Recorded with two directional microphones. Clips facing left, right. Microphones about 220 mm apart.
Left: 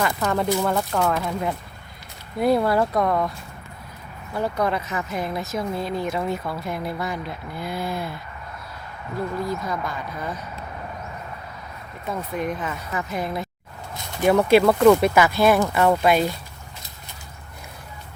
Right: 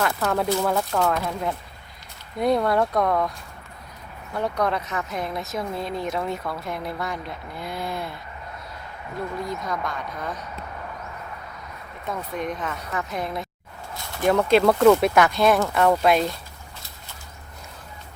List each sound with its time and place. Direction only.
0.0 s speech: 5° right (ahead or behind)
4.4 s speech: 5° left (ahead or behind)
9.4 s speech: 5° left (ahead or behind)
12.0 s speech: 5° left (ahead or behind)